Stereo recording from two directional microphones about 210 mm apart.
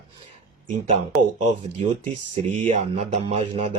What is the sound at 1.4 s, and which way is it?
Speech, 30° right (ahead or behind).